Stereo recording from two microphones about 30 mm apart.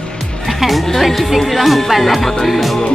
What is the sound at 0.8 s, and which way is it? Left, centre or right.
Music, centre.